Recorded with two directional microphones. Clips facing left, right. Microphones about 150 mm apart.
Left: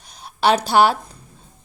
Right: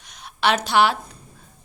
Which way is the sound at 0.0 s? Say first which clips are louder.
Left 3 dB; 35° left (ahead or behind).